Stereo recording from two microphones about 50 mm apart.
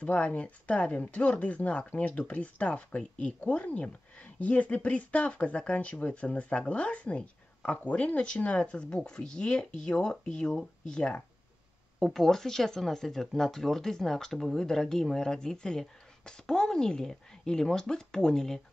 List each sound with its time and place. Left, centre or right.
0.0 s speech: left